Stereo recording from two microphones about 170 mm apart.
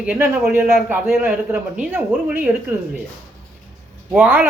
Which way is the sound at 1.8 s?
10° right (ahead or behind).